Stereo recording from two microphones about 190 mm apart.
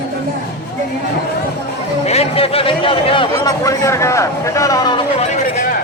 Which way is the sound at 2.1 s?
30° left (ahead or behind).